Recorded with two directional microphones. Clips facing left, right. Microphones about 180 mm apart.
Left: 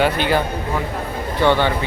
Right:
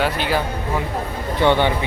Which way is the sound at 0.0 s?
Centre (ahead or behind).